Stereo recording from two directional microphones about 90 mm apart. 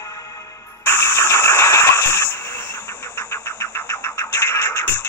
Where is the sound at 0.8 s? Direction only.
25° left (ahead or behind).